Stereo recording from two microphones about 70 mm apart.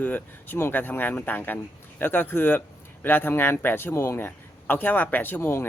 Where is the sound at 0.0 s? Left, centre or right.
Left.